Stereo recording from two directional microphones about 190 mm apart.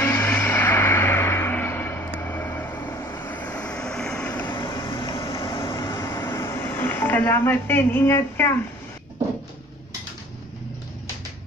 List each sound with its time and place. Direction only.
0.0 s music: 15° left (ahead or behind)
2.1 s vehicle: 10° left (ahead or behind)
4.6 s vehicle: 25° left (ahead or behind)
5.1 s vehicle: 15° left (ahead or behind)